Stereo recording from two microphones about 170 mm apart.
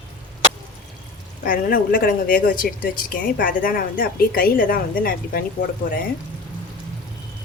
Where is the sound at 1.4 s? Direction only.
55° left (ahead or behind).